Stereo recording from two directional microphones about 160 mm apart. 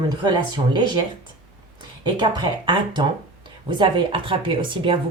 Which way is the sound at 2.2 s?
30° right (ahead or behind).